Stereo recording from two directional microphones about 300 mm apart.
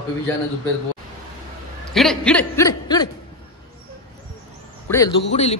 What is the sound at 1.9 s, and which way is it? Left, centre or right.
A man's voice, centre.